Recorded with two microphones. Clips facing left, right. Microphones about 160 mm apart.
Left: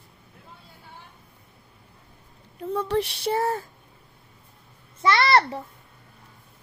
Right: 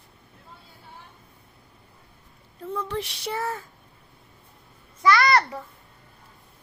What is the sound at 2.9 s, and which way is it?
Female singing, 30° left (ahead or behind).